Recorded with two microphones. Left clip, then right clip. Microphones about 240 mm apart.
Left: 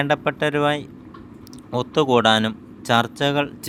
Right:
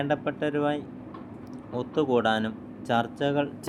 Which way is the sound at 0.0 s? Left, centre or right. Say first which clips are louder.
Left 7 dB; left.